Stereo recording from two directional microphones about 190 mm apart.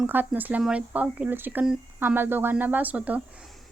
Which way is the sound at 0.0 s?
10° right (ahead or behind).